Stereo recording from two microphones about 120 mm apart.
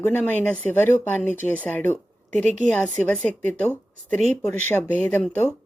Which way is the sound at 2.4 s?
90° right.